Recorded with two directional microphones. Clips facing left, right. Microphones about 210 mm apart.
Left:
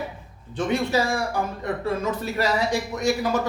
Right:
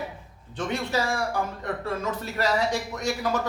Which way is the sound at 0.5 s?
10° left (ahead or behind).